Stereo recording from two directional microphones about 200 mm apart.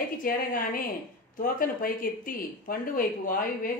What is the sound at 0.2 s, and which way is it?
Speech, 45° left (ahead or behind).